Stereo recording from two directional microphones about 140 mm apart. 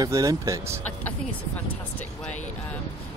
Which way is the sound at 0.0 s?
25° right (ahead or behind).